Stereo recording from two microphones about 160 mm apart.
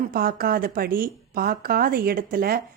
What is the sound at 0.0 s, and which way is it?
A woman's voice, 65° right (ahead or behind).